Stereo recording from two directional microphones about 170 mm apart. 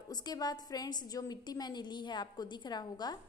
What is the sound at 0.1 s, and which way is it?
A woman's voice, 25° left (ahead or behind).